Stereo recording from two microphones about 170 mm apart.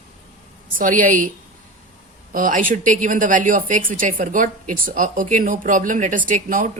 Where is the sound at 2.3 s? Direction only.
50° right (ahead or behind).